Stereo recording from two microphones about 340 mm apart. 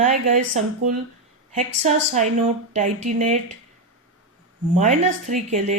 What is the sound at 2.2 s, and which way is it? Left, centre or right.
Speech, centre.